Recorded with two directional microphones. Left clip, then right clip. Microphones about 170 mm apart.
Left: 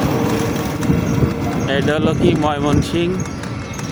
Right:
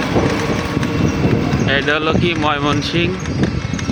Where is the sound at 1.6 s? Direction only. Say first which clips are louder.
Right 1 dB; 20° left (ahead or behind).